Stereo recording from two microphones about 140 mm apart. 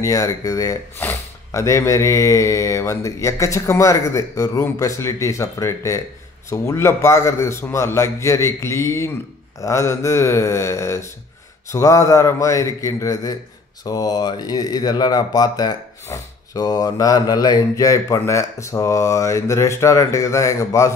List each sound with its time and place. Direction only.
0.0 s speech: 25° left (ahead or behind)